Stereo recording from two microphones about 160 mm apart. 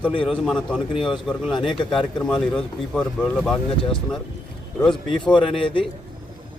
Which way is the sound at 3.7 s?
30° left (ahead or behind).